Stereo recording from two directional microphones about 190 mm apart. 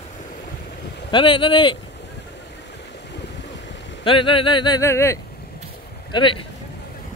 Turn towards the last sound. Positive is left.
turn(degrees=25)  # may be behind; listen again after turning